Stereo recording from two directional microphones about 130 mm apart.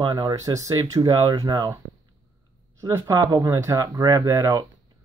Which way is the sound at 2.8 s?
25° right (ahead or behind).